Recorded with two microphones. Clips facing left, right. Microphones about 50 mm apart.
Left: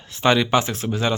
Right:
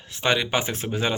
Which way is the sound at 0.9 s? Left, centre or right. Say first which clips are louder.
Left 2 dB; centre.